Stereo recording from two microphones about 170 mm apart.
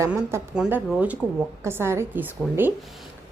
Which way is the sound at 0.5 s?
5° right (ahead or behind).